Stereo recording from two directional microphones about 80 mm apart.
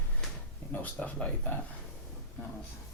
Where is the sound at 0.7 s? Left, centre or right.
Centre.